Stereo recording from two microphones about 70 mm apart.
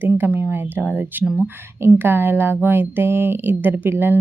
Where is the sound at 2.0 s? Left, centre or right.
Right.